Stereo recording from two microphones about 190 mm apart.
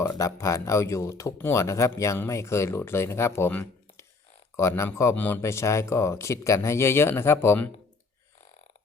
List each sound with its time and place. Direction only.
0.0 s speech: 15° left (ahead or behind)